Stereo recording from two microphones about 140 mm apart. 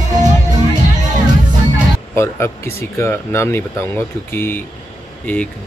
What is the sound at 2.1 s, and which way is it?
Speech, 20° left (ahead or behind).